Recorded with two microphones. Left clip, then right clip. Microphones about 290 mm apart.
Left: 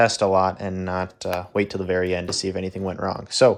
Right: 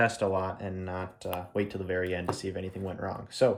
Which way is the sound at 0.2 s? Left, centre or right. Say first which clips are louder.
Left 10 dB; left.